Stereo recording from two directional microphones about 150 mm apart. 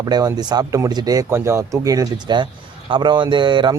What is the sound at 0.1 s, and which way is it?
A man's voice, 25° right (ahead or behind).